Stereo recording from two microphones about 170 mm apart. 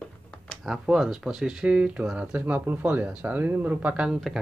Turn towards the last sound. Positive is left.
turn(degrees=0)  # may be behind; listen again after turning